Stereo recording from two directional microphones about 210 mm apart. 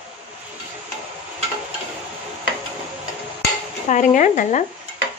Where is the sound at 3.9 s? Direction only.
35° left (ahead or behind).